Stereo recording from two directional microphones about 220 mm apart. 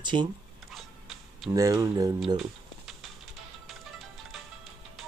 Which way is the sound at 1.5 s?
15° right (ahead or behind).